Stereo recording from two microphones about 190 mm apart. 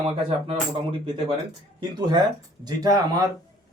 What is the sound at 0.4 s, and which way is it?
Speech, 30° right (ahead or behind).